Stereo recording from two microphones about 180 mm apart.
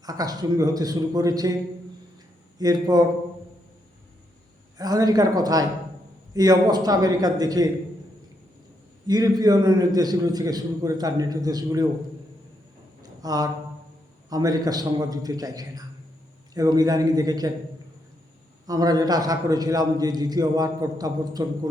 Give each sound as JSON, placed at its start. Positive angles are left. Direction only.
{"t": 0.0, "sound": "a man's voice", "side_deg": -20}
{"t": 2.6, "sound": "a man's voice", "side_deg": -20}
{"t": 4.8, "sound": "a man's voice", "side_deg": -20}
{"t": 9.0, "sound": "a man's voice", "side_deg": -20}
{"t": 13.0, "sound": "a sound", "side_deg": -20}
{"t": 14.3, "sound": "a man's voice", "side_deg": -20}
{"t": 18.6, "sound": "a man's voice", "side_deg": -20}